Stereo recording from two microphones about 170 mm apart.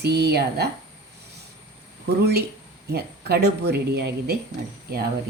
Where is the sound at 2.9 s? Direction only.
75° right (ahead or behind).